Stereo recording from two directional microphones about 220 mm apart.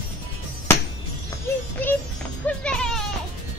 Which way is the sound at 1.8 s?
10° left (ahead or behind).